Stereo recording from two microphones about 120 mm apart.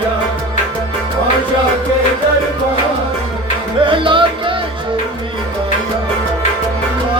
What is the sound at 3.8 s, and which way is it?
Music, 45° right (ahead or behind).